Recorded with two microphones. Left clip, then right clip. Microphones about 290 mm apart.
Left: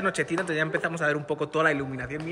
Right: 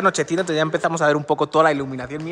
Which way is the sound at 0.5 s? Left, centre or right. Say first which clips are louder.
Right 7 dB; centre.